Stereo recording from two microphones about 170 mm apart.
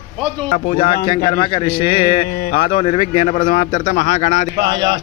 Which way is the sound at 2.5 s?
30° left (ahead or behind).